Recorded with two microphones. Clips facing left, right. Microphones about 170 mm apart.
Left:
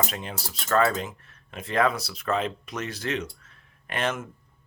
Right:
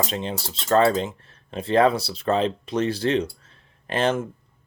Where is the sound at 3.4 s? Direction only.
30° right (ahead or behind).